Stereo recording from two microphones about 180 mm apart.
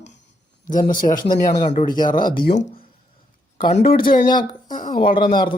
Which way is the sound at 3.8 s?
55° left (ahead or behind).